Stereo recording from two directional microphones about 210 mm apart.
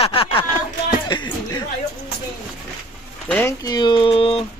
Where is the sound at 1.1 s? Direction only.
20° left (ahead or behind).